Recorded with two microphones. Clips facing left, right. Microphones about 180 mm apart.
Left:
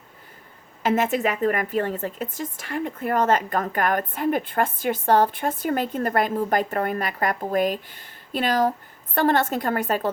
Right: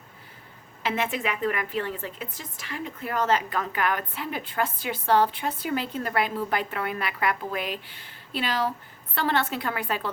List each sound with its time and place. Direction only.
0.8 s speech: 45° left (ahead or behind)